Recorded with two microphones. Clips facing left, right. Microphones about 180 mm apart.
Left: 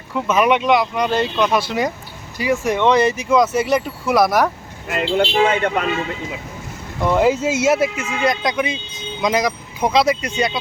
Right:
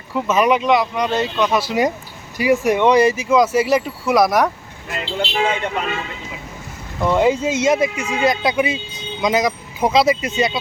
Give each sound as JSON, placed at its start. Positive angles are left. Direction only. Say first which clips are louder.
{"t": 0.1, "sound": "speech", "louder": "even", "side_deg": 0}
{"t": 4.9, "sound": "speech", "louder": "left 6 dB", "side_deg": 55}
{"t": 7.0, "sound": "speech", "louder": "even", "side_deg": 0}